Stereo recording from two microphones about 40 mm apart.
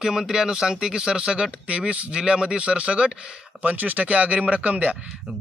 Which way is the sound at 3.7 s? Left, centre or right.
Right.